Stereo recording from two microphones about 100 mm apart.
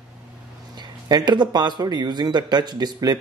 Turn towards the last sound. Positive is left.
turn(degrees=-45)  # may be behind; listen again after turning